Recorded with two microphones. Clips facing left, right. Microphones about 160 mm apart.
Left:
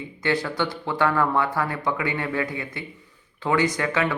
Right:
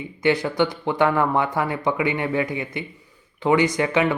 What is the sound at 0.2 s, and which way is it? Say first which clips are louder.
Speech: right 5 dB; 15° right (ahead or behind).